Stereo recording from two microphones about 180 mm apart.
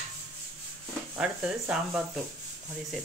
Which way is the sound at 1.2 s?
5° right (ahead or behind).